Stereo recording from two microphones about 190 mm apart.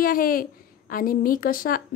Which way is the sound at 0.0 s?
50° left (ahead or behind).